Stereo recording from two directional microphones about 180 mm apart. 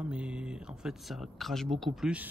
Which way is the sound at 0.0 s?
5° right (ahead or behind).